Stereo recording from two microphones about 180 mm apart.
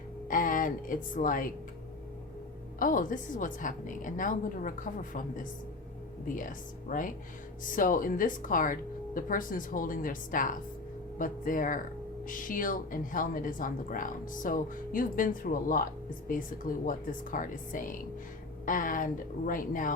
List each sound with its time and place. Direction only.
0.3 s speech: 50° left (ahead or behind)
2.7 s a woman's voice: 50° left (ahead or behind)